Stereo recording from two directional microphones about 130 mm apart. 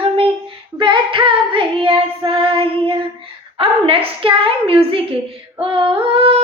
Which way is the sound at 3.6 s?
45° right (ahead or behind).